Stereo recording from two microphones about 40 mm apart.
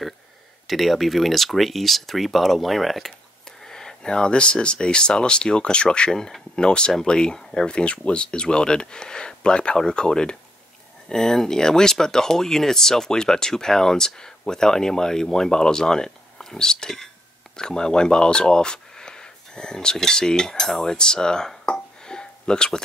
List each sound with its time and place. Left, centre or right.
0.7 s speech: centre